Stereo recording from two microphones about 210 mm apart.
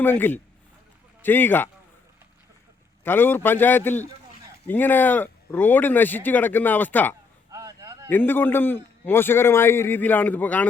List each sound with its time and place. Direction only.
0.0 s speech: 10° left (ahead or behind)
3.0 s speech: 10° left (ahead or behind)
7.5 s a sound: 15° right (ahead or behind)
8.1 s speech: 10° left (ahead or behind)